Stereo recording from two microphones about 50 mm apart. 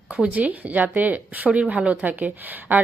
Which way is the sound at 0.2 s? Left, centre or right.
Right.